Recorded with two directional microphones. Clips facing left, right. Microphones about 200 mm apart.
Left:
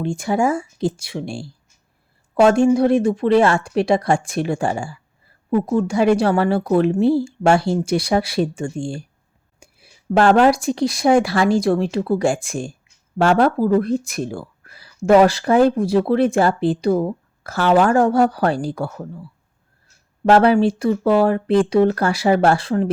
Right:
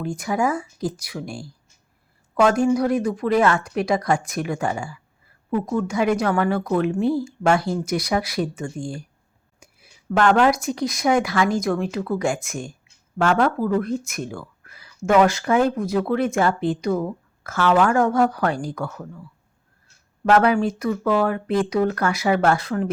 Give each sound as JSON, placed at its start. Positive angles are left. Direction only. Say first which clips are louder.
{"t": 0.0, "sound": "a woman's voice", "louder": "left 4 dB", "side_deg": 25}
{"t": 20.2, "sound": "speech", "louder": "left 4 dB", "side_deg": 30}